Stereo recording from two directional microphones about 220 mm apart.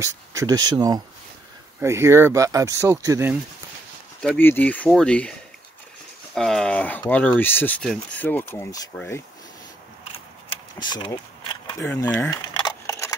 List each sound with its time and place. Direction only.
0.0 s speech: 15° right (ahead or behind)
4.2 s speech: 5° left (ahead or behind)
6.3 s speech: centre (ahead or behind)
10.1 s a sound: 25° left (ahead or behind)
11.9 s speech: 10° left (ahead or behind)
12.5 s a sound: 15° left (ahead or behind)